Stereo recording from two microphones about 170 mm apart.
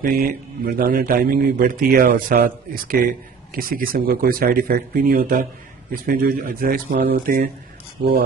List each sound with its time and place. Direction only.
0.0 s a man's voice: 60° right (ahead or behind)